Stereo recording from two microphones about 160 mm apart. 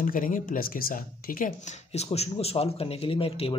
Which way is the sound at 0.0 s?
55° left (ahead or behind).